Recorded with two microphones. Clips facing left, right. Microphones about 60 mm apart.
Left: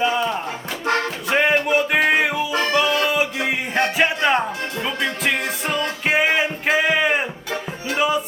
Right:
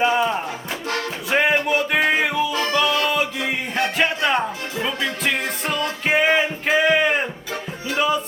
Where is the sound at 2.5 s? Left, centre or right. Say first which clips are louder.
Left 1 dB; left.